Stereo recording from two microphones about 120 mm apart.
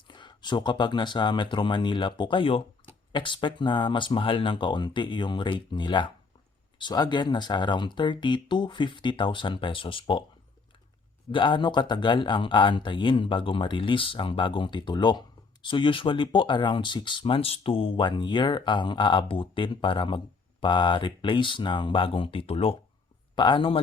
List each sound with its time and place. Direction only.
0.1 s speech: 40° left (ahead or behind)
11.3 s speech: 40° left (ahead or behind)
23.3 s speech: 40° left (ahead or behind)